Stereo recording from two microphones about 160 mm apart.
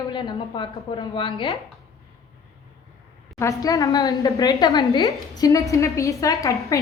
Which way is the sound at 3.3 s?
20° left (ahead or behind).